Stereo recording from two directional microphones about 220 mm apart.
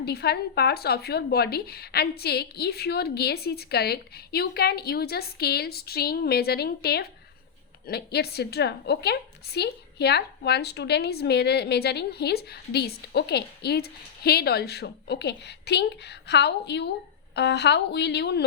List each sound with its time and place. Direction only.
0.0 s a woman's voice: 45° left (ahead or behind)